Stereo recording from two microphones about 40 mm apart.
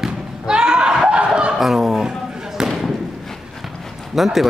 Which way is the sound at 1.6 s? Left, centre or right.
Centre.